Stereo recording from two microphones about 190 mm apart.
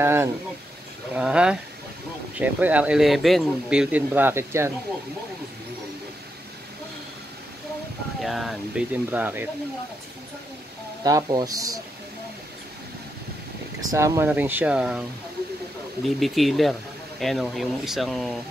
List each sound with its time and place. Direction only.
0.0 s speech: 15° right (ahead or behind)
8.2 s speech: centre (ahead or behind)
11.1 s speech: 20° right (ahead or behind)
13.7 s speech: 20° right (ahead or behind)
16.2 s speech: centre (ahead or behind)